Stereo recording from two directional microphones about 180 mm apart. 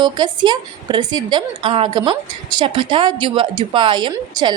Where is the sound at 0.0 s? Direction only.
25° right (ahead or behind).